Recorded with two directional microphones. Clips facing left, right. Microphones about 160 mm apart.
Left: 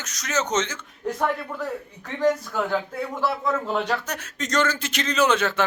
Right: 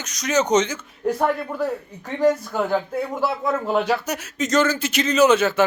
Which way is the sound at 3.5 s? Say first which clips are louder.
Right 6 dB; 10° right (ahead or behind).